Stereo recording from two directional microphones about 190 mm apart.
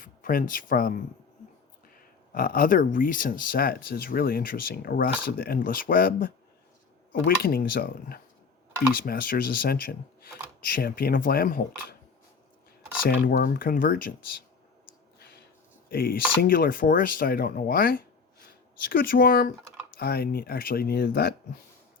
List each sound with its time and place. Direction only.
0.0 s speech: 45° left (ahead or behind)
2.3 s speech: 45° left (ahead or behind)
13.1 s speech: 60° left (ahead or behind)
13.3 s speech: 50° left (ahead or behind)
15.9 s speech: 50° left (ahead or behind)